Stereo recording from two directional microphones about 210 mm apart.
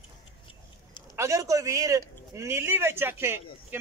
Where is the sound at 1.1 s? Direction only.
15° right (ahead or behind).